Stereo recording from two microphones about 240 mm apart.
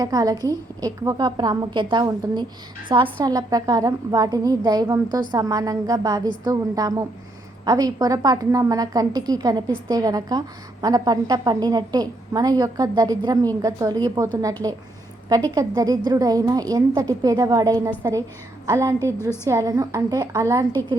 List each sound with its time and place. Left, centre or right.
0.0 s a woman's voice: centre